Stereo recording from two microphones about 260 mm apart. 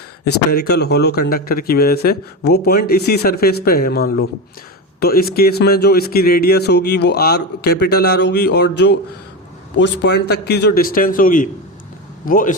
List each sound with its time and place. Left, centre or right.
0.5 s speech: left